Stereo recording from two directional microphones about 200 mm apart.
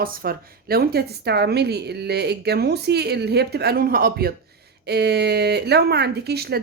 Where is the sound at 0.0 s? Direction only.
45° right (ahead or behind).